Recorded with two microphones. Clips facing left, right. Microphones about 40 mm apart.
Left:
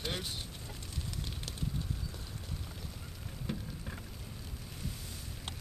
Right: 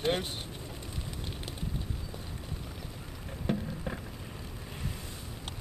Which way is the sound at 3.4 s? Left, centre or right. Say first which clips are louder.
Right 8 dB; right.